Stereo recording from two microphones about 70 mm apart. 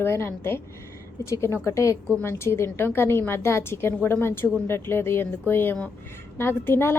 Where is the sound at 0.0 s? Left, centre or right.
Left.